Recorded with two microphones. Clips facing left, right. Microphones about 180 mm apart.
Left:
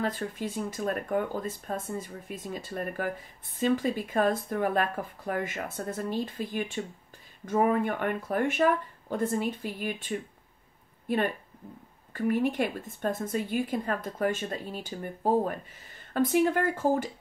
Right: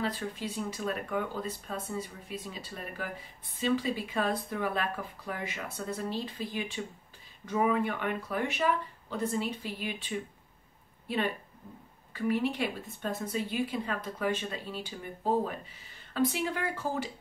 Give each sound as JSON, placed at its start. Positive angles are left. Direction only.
{"t": 0.0, "sound": "speech", "side_deg": 50}